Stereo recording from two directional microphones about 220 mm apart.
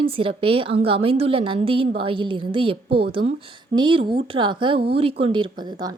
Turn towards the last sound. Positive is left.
turn(degrees=-20)  # may be behind; listen again after turning